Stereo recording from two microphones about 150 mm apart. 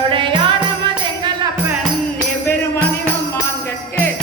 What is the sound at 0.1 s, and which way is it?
Music, 35° right (ahead or behind).